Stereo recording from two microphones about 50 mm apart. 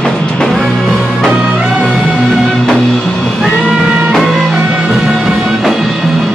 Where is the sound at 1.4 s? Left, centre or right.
Right.